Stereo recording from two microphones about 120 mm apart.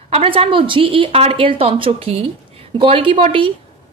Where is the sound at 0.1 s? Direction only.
55° right (ahead or behind).